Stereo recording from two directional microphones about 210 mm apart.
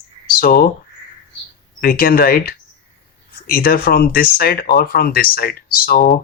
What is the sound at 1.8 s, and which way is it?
Speech, 45° left (ahead or behind).